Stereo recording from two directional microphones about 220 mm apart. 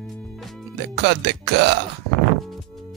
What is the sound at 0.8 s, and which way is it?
Speech, 50° right (ahead or behind).